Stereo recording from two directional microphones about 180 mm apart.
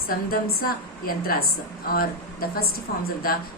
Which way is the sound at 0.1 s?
55° left (ahead or behind).